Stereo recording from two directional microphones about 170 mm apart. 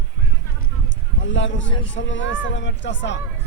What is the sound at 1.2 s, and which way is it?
Speech, 90° left.